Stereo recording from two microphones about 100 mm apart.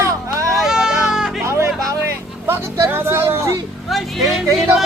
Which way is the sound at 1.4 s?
30° right (ahead or behind).